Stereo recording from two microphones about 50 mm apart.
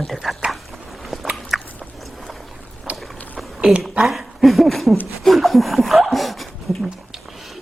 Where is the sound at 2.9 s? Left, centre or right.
Right.